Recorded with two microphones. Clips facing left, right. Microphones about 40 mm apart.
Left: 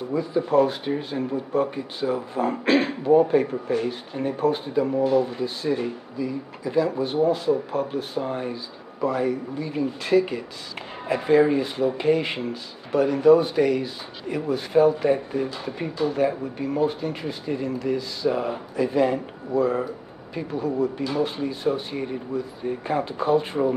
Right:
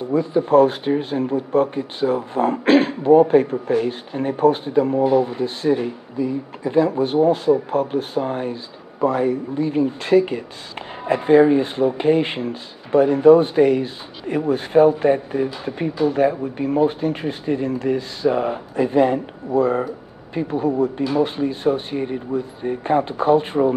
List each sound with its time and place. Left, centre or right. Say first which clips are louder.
0.1 s a man's voice: right 6 dB; right